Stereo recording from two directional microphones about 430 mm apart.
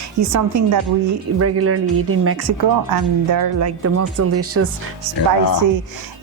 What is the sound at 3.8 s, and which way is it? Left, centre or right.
Speech, right.